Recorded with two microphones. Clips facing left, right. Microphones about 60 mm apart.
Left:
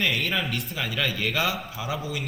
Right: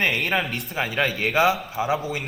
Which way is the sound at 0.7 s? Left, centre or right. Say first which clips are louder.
Right 4 dB; right.